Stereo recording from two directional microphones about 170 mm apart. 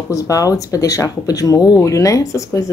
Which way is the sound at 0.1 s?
20° left (ahead or behind).